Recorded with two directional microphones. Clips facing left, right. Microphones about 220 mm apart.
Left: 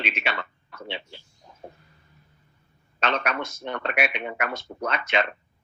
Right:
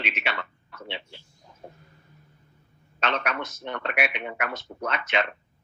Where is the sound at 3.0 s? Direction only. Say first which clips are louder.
Left 2 dB; 35° left (ahead or behind).